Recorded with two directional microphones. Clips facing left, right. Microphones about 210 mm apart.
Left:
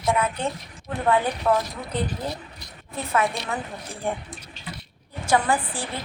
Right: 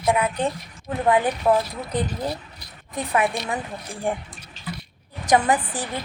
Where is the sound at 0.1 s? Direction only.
15° right (ahead or behind).